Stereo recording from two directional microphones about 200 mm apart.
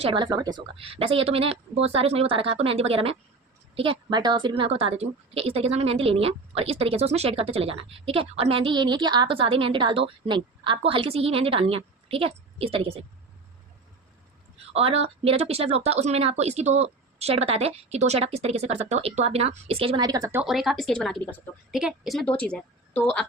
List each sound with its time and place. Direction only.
0.0 s a woman's voice: 25° right (ahead or behind)
14.7 s speech: 30° right (ahead or behind)
20.4 s a woman's voice: centre (ahead or behind)